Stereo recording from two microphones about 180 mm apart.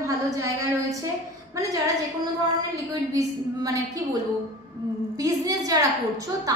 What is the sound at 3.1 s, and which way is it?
Speech, 20° right (ahead or behind).